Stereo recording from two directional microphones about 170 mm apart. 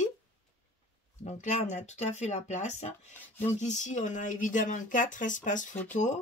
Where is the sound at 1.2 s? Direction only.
45° left (ahead or behind).